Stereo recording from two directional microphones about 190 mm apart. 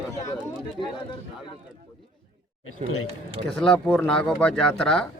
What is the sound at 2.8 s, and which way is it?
Speech, 35° right (ahead or behind).